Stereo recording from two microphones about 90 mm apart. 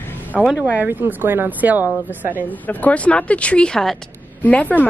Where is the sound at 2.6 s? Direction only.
15° left (ahead or behind).